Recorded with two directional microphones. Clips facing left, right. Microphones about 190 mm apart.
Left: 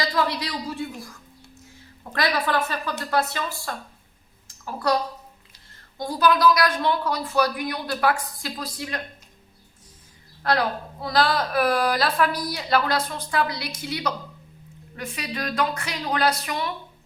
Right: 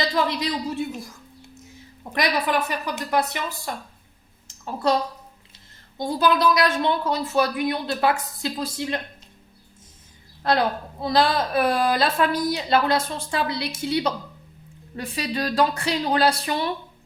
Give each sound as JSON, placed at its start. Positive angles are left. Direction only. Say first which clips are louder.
{"t": 0.0, "sound": "a woman's voice", "louder": "right 2 dB", "side_deg": -20}
{"t": 2.1, "sound": "a woman's voice", "louder": "right 1 dB", "side_deg": -20}
{"t": 4.4, "sound": "a sound", "louder": "right 2 dB", "side_deg": -25}
{"t": 6.0, "sound": "a woman's voice", "louder": "even", "side_deg": -25}
{"t": 10.4, "sound": "a woman's voice", "louder": "right 2 dB", "side_deg": -25}